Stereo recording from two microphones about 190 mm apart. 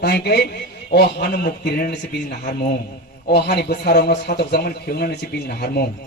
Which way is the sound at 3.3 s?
60° left (ahead or behind).